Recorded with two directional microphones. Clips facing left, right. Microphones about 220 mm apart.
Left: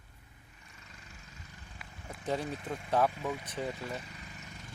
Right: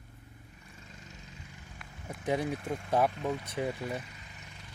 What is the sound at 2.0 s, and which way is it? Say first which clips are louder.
Speech: right 3 dB; 15° right (ahead or behind).